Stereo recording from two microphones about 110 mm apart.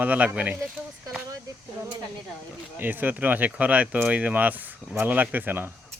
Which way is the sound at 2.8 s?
15° right (ahead or behind).